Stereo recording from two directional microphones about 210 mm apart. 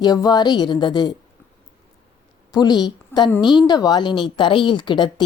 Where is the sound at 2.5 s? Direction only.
20° left (ahead or behind).